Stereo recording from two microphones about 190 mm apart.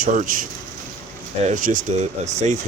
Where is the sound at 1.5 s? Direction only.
45° right (ahead or behind).